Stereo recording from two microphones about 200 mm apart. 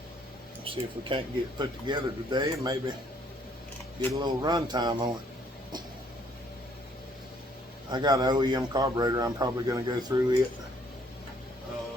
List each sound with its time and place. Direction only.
0.6 s speech: 25° right (ahead or behind)
4.1 s speech: 20° right (ahead or behind)
7.9 s speech: 20° right (ahead or behind)